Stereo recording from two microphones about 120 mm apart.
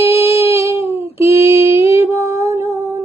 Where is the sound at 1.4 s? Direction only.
25° right (ahead or behind).